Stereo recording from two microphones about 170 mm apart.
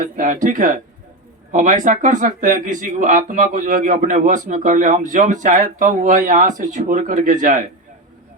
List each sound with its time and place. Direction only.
0.0 s speech: 50° right (ahead or behind)